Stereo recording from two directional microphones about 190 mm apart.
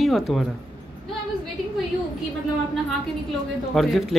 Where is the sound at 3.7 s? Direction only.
Centre (ahead or behind).